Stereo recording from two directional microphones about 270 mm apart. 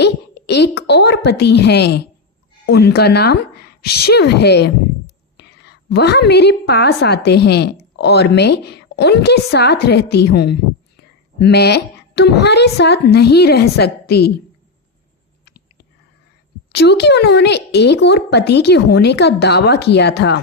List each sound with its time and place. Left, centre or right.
0.0 s a woman's voice: left
16.7 s speech: left